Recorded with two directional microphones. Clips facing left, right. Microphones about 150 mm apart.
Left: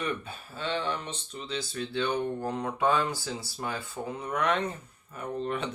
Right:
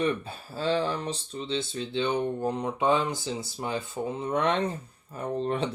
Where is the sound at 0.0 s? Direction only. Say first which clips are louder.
Right 6 dB; 35° right (ahead or behind).